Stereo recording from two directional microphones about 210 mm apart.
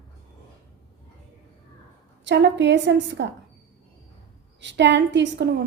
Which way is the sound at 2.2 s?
60° right (ahead or behind).